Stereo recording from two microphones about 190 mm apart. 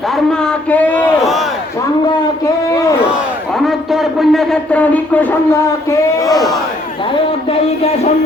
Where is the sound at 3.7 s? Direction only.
Centre (ahead or behind); by 6.5 s 20° left (ahead or behind).